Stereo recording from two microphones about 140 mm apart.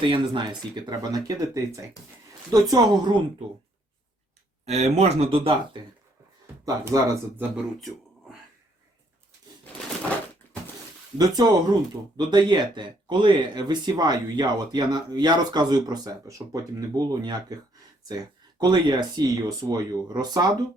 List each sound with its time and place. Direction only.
0.0 s speech: 40° right (ahead or behind)
0.9 s speech: 25° right (ahead or behind)
4.6 s speech: 50° right (ahead or behind)
6.8 s speech: 15° right (ahead or behind)
7.8 s a sound: centre (ahead or behind)
11.2 s speech: 25° right (ahead or behind)
18.6 s speech: 30° right (ahead or behind)